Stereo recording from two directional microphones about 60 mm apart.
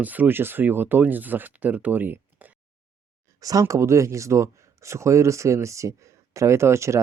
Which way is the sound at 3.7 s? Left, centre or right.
Right.